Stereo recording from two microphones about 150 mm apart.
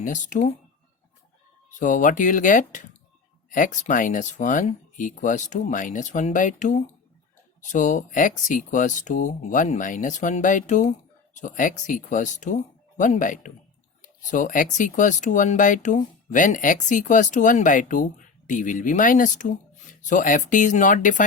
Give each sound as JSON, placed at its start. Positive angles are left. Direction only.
{"t": 0.0, "sound": "speech", "side_deg": 55}
{"t": 1.8, "sound": "speech", "side_deg": 60}